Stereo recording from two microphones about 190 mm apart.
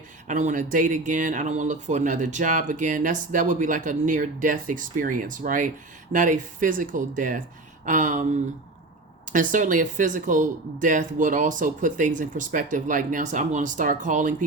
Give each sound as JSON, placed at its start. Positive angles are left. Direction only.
{"t": 0.3, "sound": "speech", "side_deg": -40}
{"t": 9.3, "sound": "speech", "side_deg": -45}